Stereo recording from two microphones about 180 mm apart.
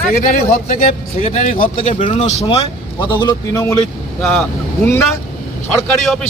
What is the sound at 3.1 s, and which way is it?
Speech, 25° left (ahead or behind).